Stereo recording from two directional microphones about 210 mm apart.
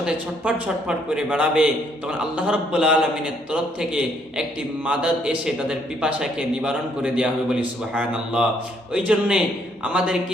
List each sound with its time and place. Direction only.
0.0 s a man's voice: 5° right (ahead or behind)